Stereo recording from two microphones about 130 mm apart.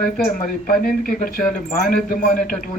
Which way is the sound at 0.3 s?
90° left.